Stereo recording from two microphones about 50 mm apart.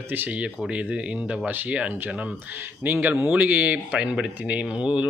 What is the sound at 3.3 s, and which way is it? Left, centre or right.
A man's voice, right.